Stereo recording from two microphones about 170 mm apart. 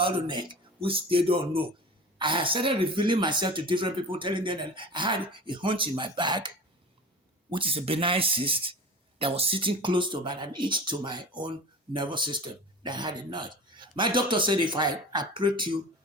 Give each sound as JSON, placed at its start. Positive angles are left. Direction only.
{"t": 0.0, "sound": "speech", "side_deg": -25}
{"t": 7.5, "sound": "speech", "side_deg": -35}